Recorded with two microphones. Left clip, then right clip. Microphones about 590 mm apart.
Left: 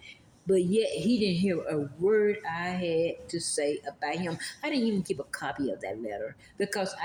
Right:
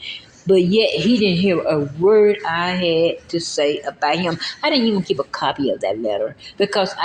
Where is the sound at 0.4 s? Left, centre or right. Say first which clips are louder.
Right 11 dB; left.